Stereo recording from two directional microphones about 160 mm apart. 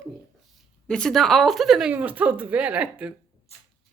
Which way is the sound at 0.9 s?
5° left (ahead or behind).